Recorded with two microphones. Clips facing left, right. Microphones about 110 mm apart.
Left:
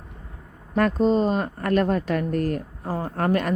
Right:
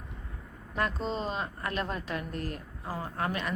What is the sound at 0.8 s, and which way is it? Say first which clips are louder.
Speech: left 12 dB; 45° left (ahead or behind).